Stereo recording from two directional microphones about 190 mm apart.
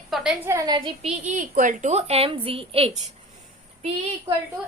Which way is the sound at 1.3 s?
45° right (ahead or behind).